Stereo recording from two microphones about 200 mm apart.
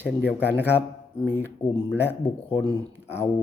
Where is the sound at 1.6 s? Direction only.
5° left (ahead or behind).